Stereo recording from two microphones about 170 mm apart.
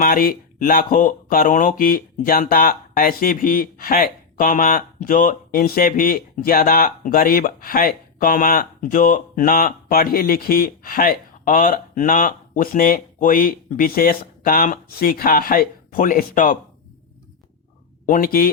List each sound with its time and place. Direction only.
0.0 s speech: 55° left (ahead or behind)
18.0 s speech: 55° left (ahead or behind)